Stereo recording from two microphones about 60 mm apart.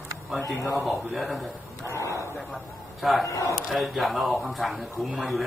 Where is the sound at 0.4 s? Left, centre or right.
Left.